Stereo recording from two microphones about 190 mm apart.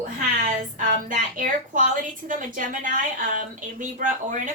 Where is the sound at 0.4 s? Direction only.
45° right (ahead or behind).